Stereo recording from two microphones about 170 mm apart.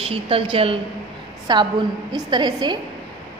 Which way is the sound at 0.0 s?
35° right (ahead or behind).